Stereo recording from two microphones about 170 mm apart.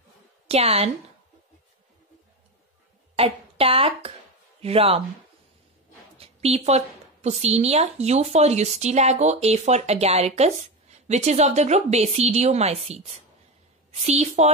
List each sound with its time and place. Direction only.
0.5 s a woman's voice: 35° right (ahead or behind)
3.2 s a woman's voice: 35° right (ahead or behind)
6.1 s a woman's voice: 35° right (ahead or behind)